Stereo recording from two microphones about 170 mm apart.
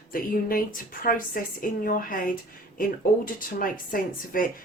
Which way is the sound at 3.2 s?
55° left (ahead or behind).